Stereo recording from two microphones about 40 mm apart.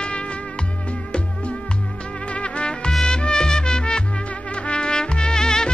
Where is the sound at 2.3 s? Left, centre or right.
Left.